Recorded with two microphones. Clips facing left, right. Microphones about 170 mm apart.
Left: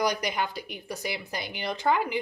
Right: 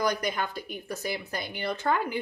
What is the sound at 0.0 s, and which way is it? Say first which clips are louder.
Speech: left 1 dB; 15° left (ahead or behind).